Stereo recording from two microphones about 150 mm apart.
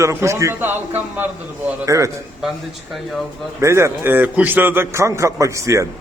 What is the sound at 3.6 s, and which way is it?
A man's voice, 20° right (ahead or behind).